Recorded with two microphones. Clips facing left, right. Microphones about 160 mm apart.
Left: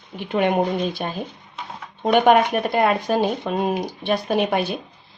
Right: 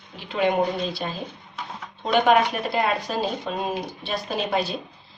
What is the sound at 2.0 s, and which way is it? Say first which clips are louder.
Speech: left 3 dB; 55° left (ahead or behind).